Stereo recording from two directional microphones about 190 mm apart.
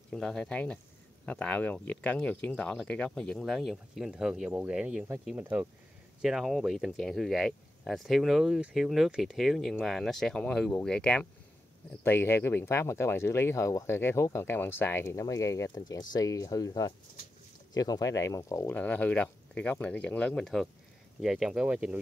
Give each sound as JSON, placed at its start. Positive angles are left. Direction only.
{"t": 0.1, "sound": "speech", "side_deg": 5}